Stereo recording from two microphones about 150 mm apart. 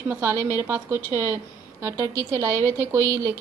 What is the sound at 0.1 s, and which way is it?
A woman's voice, 20° right (ahead or behind).